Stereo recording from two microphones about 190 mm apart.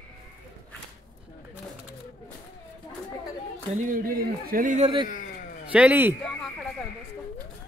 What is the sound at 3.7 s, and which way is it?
Speech, 45° right (ahead or behind).